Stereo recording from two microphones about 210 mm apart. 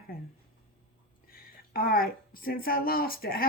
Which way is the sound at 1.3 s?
45° left (ahead or behind).